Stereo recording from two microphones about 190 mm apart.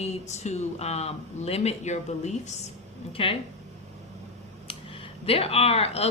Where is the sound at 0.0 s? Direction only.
35° left (ahead or behind).